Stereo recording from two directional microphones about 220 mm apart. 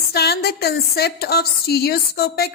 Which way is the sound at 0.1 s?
45° left (ahead or behind).